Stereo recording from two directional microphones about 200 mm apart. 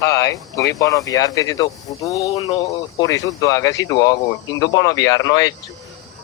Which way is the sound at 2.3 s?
30° left (ahead or behind).